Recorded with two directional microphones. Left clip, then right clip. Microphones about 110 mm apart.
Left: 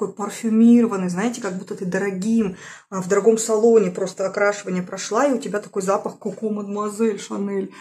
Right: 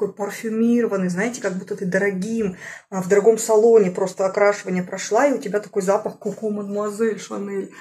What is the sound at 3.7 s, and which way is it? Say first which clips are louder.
Speech: right 2 dB; 5° left (ahead or behind).